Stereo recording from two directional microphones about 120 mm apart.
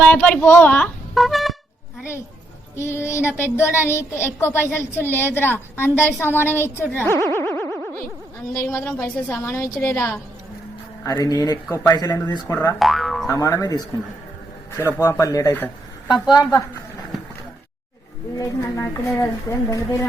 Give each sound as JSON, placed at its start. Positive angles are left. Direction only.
{"t": 0.0, "sound": "a woman's voice", "side_deg": 10}
{"t": 1.1, "sound": "a sound", "side_deg": 0}
{"t": 2.7, "sound": "a woman's voice", "side_deg": 20}
{"t": 7.3, "sound": "boing", "side_deg": 20}
{"t": 8.5, "sound": "a woman's voice", "side_deg": 20}
{"t": 11.0, "sound": "speech", "side_deg": 30}
{"t": 12.8, "sound": "speech", "side_deg": 0}
{"t": 13.3, "sound": "a woman's voice", "side_deg": 25}
{"t": 14.8, "sound": "a woman's voice", "side_deg": 20}
{"t": 15.0, "sound": "a woman's voice", "side_deg": 30}
{"t": 18.3, "sound": "a woman's voice", "side_deg": 25}